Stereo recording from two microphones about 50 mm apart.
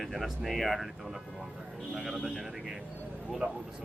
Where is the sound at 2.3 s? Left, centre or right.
Centre.